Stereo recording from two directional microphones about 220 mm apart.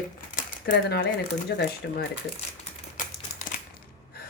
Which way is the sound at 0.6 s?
45° left (ahead or behind).